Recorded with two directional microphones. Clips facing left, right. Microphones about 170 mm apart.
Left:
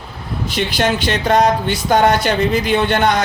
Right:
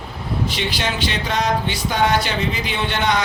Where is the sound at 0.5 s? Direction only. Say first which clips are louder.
Left 6 dB; 50° left (ahead or behind).